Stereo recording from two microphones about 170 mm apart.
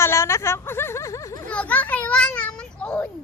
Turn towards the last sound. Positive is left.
turn(degrees=5)  # may be behind; listen again after turning